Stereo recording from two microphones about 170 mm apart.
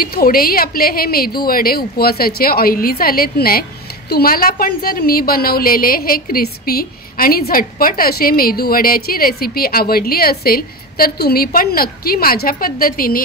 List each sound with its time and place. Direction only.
0.0 s a woman's voice: 60° left (ahead or behind)